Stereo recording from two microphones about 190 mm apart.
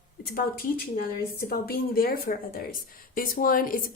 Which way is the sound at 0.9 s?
50° left (ahead or behind).